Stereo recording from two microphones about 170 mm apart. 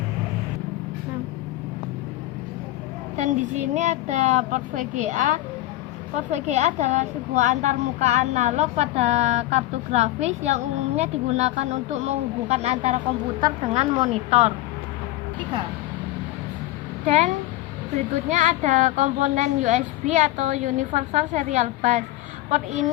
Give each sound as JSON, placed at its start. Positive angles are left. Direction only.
{"t": 3.2, "sound": "a woman's voice", "side_deg": -45}
{"t": 17.1, "sound": "a woman's voice", "side_deg": -40}